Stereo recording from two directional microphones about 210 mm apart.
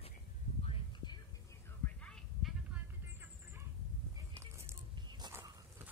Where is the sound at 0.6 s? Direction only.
25° left (ahead or behind).